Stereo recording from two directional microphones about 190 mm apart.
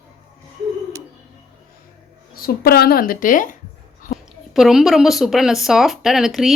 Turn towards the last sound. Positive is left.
turn(degrees=0)  # may be behind; listen again after turning